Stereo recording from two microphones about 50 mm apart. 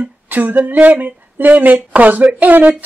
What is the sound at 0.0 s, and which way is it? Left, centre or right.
Speech, right.